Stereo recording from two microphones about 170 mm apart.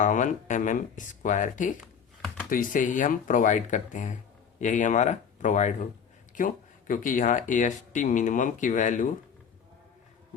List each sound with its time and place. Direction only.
0.0 s speech: 50° left (ahead or behind)
1.8 s computer keyboard: 5° left (ahead or behind)
2.5 s speech: 50° left (ahead or behind)